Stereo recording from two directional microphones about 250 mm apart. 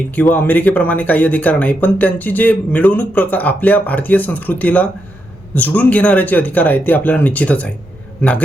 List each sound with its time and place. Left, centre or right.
0.2 s speech: centre